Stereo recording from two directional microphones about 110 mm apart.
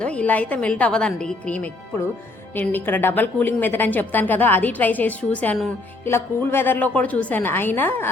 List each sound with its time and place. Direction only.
0.0 s a woman's voice: 10° left (ahead or behind)